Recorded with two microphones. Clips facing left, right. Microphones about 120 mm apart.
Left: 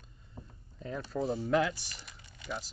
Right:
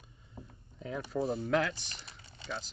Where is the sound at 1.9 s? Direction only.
30° right (ahead or behind).